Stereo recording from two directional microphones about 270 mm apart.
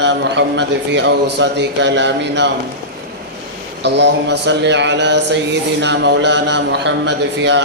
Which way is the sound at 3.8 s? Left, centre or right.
Right.